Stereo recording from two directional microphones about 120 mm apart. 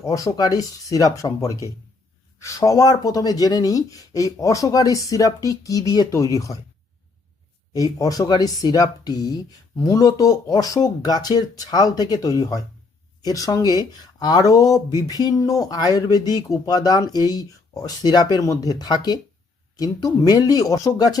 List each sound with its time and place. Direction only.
0.0 s speech: 30° left (ahead or behind)
7.7 s speech: 30° left (ahead or behind)